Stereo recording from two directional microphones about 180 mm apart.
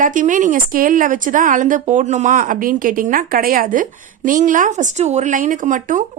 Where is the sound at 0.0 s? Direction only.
45° right (ahead or behind).